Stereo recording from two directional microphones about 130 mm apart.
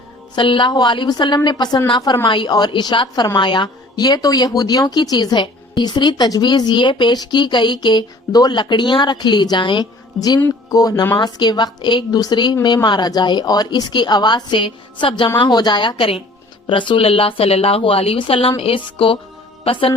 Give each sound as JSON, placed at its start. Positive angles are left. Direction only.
{"t": 0.3, "sound": "a woman's voice", "side_deg": 40}